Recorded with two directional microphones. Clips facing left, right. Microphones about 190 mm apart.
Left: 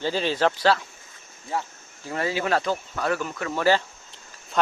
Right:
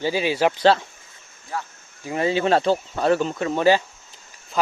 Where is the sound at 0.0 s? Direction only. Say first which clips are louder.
Right 2 dB; 10° right (ahead or behind).